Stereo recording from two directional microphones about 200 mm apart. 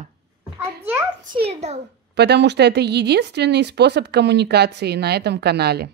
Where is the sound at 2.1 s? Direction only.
55° right (ahead or behind).